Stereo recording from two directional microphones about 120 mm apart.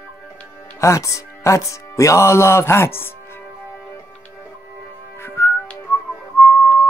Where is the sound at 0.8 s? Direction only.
25° left (ahead or behind).